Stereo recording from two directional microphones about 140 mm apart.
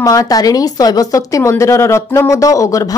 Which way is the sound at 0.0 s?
25° left (ahead or behind).